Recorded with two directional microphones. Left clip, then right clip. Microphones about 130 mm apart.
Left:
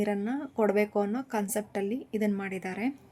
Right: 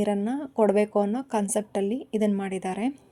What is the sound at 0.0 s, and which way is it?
A woman's voice, 40° right (ahead or behind).